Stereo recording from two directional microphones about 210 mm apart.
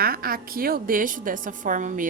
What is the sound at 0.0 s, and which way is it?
A woman's voice, 45° right (ahead or behind).